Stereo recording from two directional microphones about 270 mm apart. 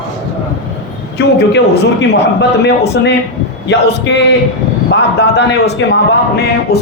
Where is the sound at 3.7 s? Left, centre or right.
Left.